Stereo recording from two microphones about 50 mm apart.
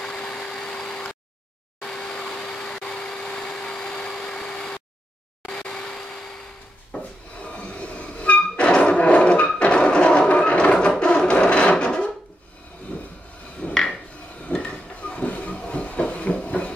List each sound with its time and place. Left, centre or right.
0.0 s vacuum cleaner: centre
5.5 s vehicle: centre
6.9 s wood: left
7.4 s a sound: left
9.6 s music: left
11.0 s wood: left
13.6 s a sound: left